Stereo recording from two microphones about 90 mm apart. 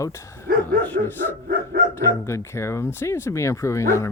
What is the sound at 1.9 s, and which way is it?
Speech, 35° left (ahead or behind).